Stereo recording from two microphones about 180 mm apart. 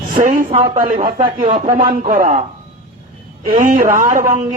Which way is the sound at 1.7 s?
45° right (ahead or behind).